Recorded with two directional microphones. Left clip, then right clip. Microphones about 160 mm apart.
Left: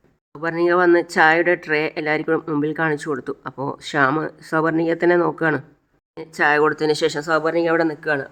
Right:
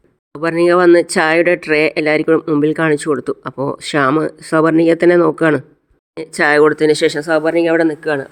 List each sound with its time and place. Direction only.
0.3 s speech: 35° right (ahead or behind)